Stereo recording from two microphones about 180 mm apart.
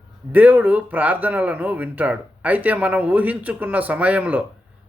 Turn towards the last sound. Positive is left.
turn(degrees=-10)  # may be behind; listen again after turning